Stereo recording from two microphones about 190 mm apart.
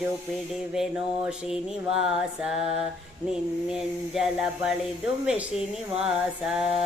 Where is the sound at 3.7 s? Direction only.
Centre (ahead or behind).